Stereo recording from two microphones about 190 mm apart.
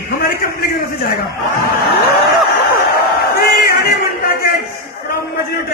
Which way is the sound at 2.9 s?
55° left (ahead or behind).